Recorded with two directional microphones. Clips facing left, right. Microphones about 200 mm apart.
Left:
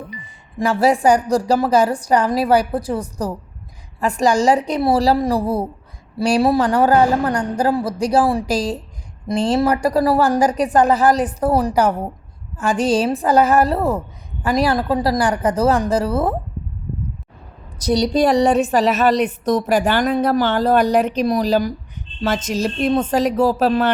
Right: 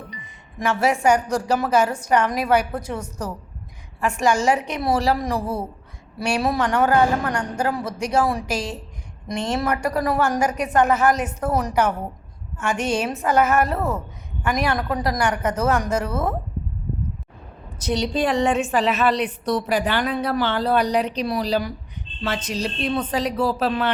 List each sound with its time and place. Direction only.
0.2 s a woman's voice: 35° left (ahead or behind)
17.7 s a woman's voice: 35° left (ahead or behind)